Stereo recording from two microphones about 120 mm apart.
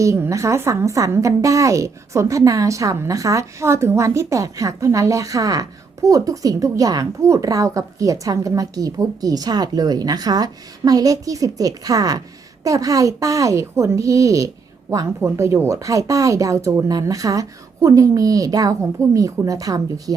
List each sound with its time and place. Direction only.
0.0 s a woman's voice: 25° right (ahead or behind)